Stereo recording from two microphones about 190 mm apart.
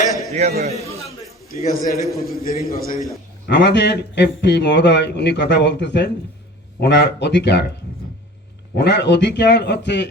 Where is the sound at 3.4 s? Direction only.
60° left (ahead or behind).